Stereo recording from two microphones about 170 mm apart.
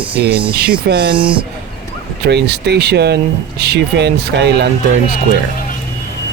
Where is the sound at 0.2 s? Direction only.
80° right.